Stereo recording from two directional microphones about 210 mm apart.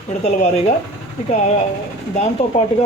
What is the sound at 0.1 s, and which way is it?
Speech, 35° left (ahead or behind).